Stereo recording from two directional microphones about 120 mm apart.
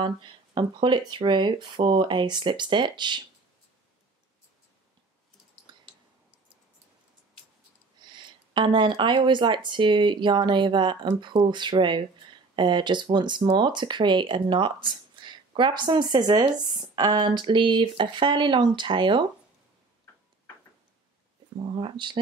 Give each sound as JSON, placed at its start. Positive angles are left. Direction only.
{"t": 0.0, "sound": "speech", "side_deg": -45}
{"t": 5.7, "sound": "clicking", "side_deg": -35}
{"t": 8.0, "sound": "speech", "side_deg": -40}
{"t": 21.5, "sound": "speech", "side_deg": -45}